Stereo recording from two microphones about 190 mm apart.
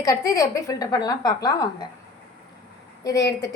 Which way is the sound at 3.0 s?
20° left (ahead or behind).